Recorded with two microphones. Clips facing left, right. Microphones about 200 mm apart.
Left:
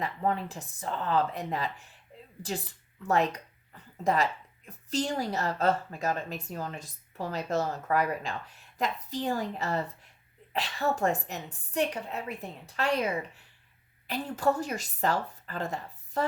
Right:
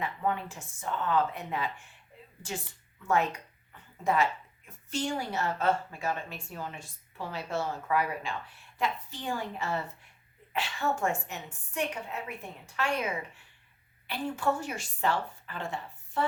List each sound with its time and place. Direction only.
0.0 s speech: 35° left (ahead or behind)